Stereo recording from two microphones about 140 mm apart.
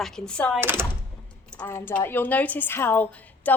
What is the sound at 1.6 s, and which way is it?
A woman's voice, 15° left (ahead or behind).